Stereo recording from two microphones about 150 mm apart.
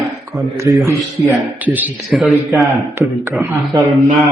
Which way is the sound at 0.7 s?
20° right (ahead or behind).